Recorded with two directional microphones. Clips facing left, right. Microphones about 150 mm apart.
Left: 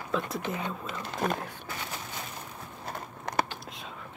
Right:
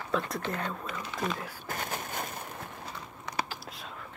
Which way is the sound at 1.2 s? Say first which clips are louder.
Left 4 dB; 55° left (ahead or behind).